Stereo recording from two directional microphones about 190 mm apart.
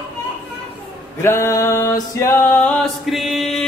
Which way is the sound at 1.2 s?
15° left (ahead or behind).